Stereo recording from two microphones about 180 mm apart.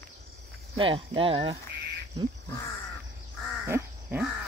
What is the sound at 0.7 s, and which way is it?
Speech, 30° right (ahead or behind).